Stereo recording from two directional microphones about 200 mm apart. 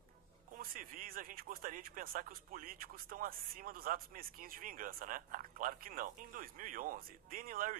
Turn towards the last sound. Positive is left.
turn(degrees=-45)  # may be behind; listen again after turning